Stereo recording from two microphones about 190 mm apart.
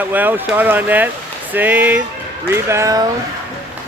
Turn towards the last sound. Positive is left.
turn(degrees=-15)  # may be behind; listen again after turning